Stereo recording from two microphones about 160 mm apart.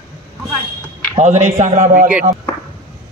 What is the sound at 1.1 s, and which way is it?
Speech, 45° right (ahead or behind).